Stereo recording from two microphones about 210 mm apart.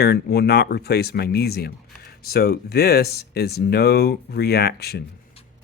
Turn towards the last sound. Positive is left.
turn(degrees=50)  # may be behind; listen again after turning